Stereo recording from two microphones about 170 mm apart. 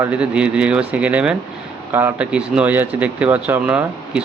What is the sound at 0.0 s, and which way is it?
Speech, 5° right (ahead or behind).